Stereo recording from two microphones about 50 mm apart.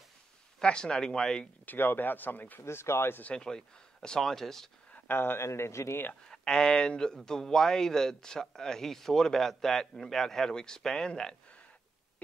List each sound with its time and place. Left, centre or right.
0.6 s speech: centre
1.7 s speech: left
2.6 s speech: left
3.3 s speech: centre
4.9 s speech: left
5.4 s speech: left
6.2 s speech: centre